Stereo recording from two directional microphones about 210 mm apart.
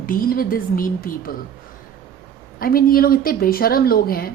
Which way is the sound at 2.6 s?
45° left (ahead or behind).